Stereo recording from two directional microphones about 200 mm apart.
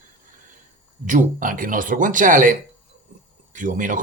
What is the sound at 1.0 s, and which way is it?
Speech, 40° right (ahead or behind).